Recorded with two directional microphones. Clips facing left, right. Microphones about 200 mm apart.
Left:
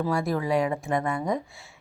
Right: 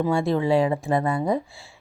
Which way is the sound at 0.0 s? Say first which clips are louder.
Right 4 dB; 25° right (ahead or behind).